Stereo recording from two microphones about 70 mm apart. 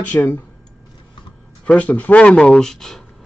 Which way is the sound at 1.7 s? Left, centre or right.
Left.